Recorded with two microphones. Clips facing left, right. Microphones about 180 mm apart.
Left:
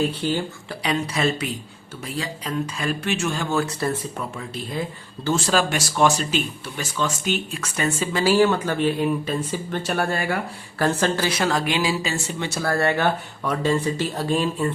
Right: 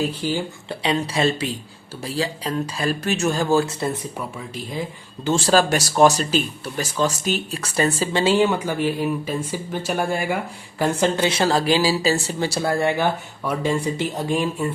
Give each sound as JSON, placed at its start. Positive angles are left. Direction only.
{"t": 0.0, "sound": "speech", "side_deg": -10}
{"t": 0.7, "sound": "speech", "side_deg": -25}
{"t": 5.5, "sound": "speech", "side_deg": -40}
{"t": 11.3, "sound": "speech", "side_deg": -30}
{"t": 12.6, "sound": "speech", "side_deg": -15}